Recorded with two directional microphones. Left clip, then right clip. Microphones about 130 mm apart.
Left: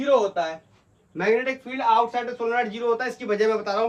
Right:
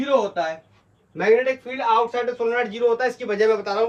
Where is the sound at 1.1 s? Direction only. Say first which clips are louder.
Right 4 dB; 5° left (ahead or behind).